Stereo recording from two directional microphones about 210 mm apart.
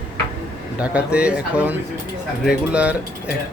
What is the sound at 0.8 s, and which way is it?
Speech, 5° right (ahead or behind).